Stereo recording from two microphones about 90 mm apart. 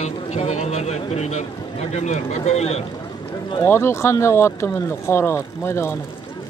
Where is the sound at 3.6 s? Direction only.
30° left (ahead or behind).